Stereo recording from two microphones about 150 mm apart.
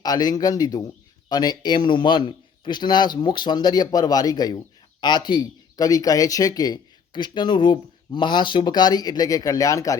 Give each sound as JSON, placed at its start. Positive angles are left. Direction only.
{"t": 0.0, "sound": "a man's voice", "side_deg": 25}